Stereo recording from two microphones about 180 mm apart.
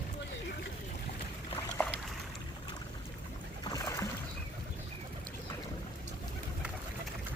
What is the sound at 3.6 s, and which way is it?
Music, 20° left (ahead or behind).